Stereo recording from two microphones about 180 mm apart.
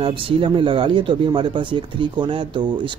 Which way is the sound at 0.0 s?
30° right (ahead or behind).